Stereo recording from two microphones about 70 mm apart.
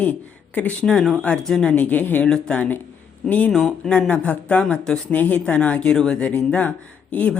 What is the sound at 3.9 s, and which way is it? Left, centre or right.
Speech, centre.